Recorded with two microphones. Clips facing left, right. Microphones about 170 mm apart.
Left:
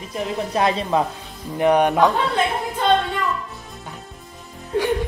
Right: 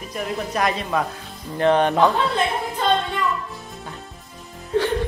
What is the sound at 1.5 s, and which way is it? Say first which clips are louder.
Speech: left 1 dB; 15° left (ahead or behind).